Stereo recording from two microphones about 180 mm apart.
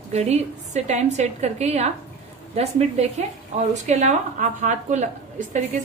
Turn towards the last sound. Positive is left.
turn(degrees=-40)  # may be behind; listen again after turning